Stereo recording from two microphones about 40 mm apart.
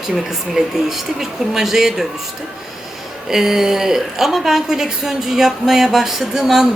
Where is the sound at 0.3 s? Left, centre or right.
Centre.